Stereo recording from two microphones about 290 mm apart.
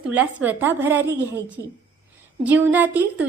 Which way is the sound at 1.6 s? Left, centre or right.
Right.